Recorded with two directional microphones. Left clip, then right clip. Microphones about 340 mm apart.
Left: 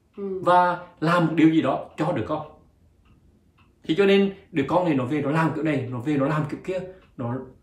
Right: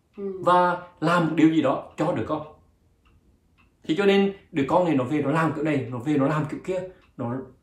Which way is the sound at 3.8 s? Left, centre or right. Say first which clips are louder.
Left 1 dB; centre.